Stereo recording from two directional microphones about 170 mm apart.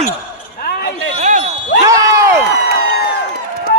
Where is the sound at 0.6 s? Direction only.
65° left (ahead or behind).